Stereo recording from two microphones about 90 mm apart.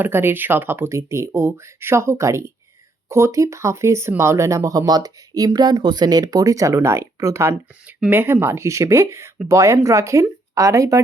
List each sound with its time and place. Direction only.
0.0 s speech: 25° right (ahead or behind)
7.9 s speech: 20° right (ahead or behind)